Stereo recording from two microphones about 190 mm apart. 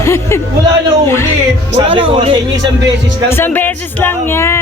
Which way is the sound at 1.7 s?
25° right (ahead or behind).